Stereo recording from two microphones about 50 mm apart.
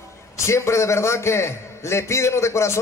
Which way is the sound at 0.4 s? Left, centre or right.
Left.